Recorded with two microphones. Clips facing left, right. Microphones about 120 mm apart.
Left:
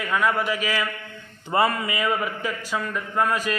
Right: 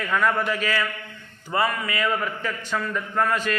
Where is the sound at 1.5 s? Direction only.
25° left (ahead or behind).